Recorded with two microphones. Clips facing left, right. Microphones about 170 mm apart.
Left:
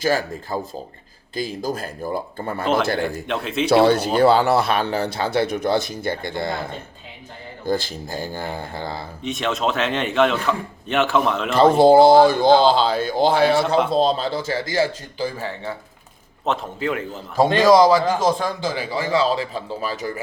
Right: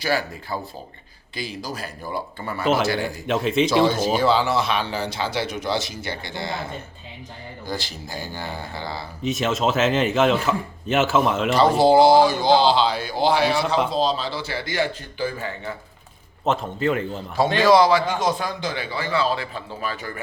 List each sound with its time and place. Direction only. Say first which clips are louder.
0.0 s speech: left 3 dB; 45° left (ahead or behind)
3.2 s speech: right 3 dB; centre (ahead or behind)
4.2 s speech: left 7 dB; 60° left (ahead or behind)
9.2 s speech: right 1 dB; centre (ahead or behind)
11.5 s speech: left 4 dB; 50° left (ahead or behind)
13.7 s speech: left 4 dB; centre (ahead or behind)
14.0 s speech: left 3 dB; 50° left (ahead or behind)
16.5 s speech: right 1 dB; centre (ahead or behind)
17.3 s a man's voice: left 3 dB; 45° left (ahead or behind)